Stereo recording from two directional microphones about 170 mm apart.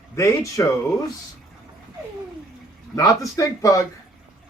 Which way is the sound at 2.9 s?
20° left (ahead or behind).